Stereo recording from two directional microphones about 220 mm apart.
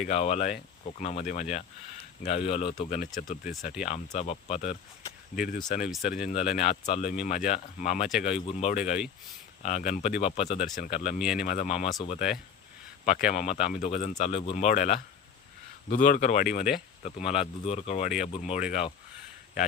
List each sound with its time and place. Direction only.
0.0 s speech: 30° left (ahead or behind)
11.2 s speech: 5° right (ahead or behind)
11.4 s speech: 30° left (ahead or behind)